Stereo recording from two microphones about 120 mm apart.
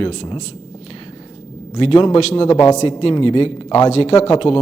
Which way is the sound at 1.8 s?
50° left (ahead or behind).